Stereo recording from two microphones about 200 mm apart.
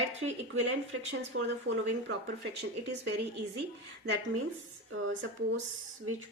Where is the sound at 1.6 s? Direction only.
60° right (ahead or behind).